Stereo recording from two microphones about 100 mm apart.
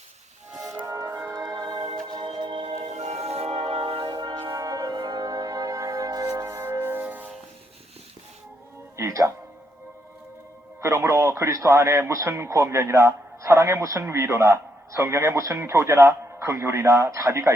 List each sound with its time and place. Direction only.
0.9 s music: 35° right (ahead or behind)
2.1 s music: 50° right (ahead or behind); by 7.3 s 15° right (ahead or behind)
9.0 s music: 30° right (ahead or behind)
10.8 s speech: 25° right (ahead or behind)